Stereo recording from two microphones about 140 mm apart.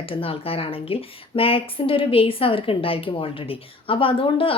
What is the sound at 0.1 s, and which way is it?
A woman's voice, 40° left (ahead or behind).